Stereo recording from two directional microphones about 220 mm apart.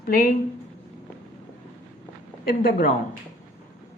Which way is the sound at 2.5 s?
40° left (ahead or behind).